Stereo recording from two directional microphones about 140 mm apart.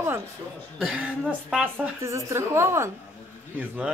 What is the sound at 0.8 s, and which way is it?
A woman's voice, 5° right (ahead or behind).